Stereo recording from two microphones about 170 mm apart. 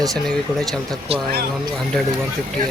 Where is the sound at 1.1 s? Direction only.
35° right (ahead or behind).